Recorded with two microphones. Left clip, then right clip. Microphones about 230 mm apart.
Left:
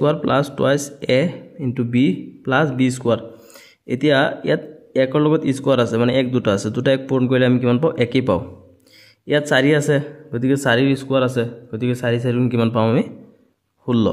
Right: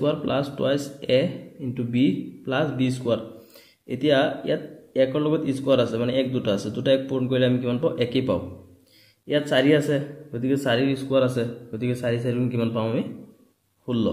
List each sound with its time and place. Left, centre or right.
0.0 s speech: left
9.5 s speech: left